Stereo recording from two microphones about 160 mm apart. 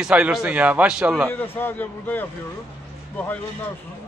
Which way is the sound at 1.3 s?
15° left (ahead or behind).